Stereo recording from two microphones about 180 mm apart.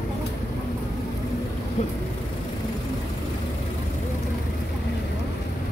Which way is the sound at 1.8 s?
45° left (ahead or behind).